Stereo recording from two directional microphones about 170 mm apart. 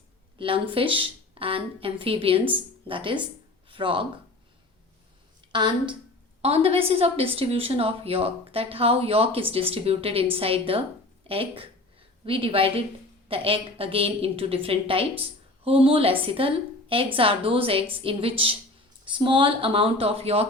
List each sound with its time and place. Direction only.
0.3 s speech: 30° right (ahead or behind)
5.5 s a woman's voice: 25° right (ahead or behind)